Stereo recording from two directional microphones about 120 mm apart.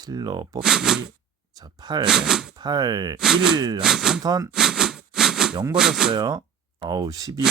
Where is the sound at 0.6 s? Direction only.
5° right (ahead or behind).